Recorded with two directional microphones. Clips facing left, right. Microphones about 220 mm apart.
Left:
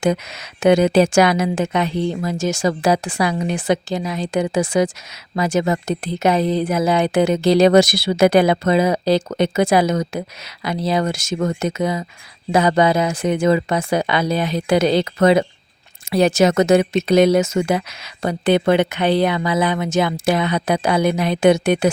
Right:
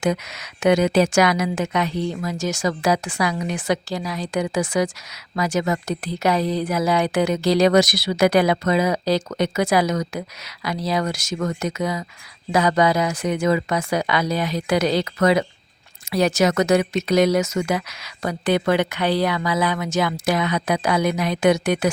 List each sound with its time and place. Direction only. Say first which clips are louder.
0.0 s speech: left 3 dB; 30° left (ahead or behind)